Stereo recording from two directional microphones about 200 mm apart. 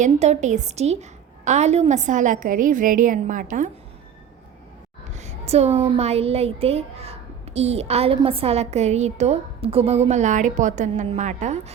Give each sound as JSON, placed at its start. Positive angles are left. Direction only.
{"t": 0.0, "sound": "a woman's voice", "side_deg": -35}
{"t": 5.1, "sound": "a woman's voice", "side_deg": -35}